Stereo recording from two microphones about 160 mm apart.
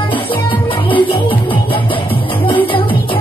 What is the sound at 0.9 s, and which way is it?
Music, 35° left (ahead or behind).